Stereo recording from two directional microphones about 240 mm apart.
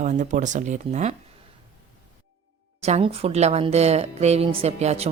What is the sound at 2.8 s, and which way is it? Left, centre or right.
A woman's voice, right.